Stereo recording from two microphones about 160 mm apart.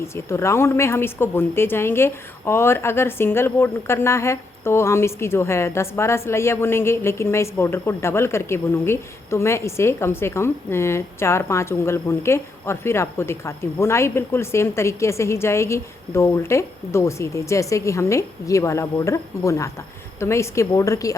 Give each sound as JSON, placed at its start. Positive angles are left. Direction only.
{"t": 0.3, "sound": "a woman's voice", "side_deg": 15}